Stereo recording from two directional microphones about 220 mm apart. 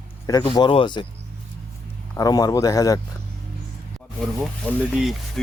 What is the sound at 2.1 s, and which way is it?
Speech, 15° left (ahead or behind).